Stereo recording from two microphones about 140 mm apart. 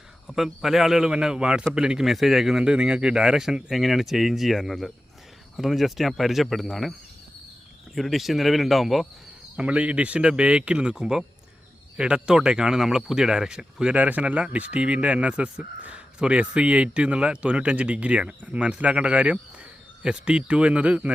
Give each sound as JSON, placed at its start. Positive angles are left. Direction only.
{"t": 0.3, "sound": "a man's voice", "side_deg": 0}
{"t": 7.9, "sound": "a man's voice", "side_deg": 0}